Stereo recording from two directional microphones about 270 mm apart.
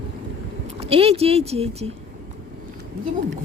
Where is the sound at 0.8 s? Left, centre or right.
Right.